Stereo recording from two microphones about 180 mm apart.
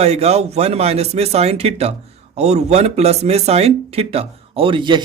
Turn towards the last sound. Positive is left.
turn(degrees=-25)  # may be behind; listen again after turning